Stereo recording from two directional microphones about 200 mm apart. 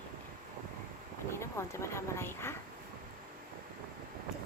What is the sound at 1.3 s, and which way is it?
Speech, 15° left (ahead or behind).